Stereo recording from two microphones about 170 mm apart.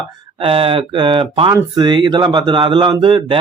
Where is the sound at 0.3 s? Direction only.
35° right (ahead or behind).